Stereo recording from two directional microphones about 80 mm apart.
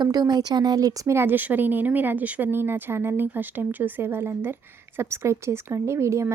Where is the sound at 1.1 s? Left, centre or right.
Right.